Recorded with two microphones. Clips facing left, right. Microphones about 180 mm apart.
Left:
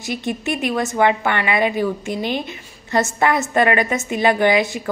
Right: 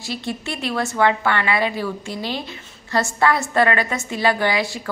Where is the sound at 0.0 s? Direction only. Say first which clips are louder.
Left 4 dB; 20° left (ahead or behind).